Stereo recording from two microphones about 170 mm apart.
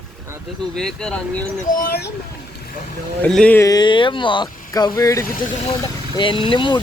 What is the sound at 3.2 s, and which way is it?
Speech, 5° left (ahead or behind).